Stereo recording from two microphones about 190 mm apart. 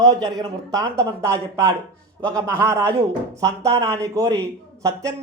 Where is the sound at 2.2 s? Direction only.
15° right (ahead or behind).